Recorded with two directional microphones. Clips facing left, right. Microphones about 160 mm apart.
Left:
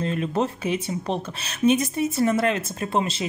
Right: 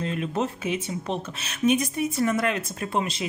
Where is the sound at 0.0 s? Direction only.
40° left (ahead or behind).